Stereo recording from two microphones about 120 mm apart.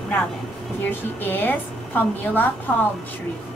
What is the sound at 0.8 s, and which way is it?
A woman's voice, 15° left (ahead or behind).